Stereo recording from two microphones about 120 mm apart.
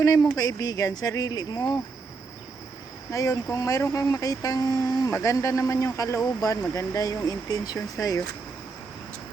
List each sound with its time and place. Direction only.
0.0 s speech: 30° left (ahead or behind)
3.1 s speech: 30° left (ahead or behind)